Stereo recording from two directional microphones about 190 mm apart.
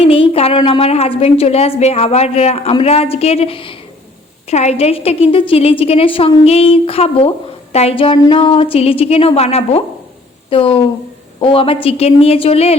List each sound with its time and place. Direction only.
0.0 s a woman's voice: 30° left (ahead or behind)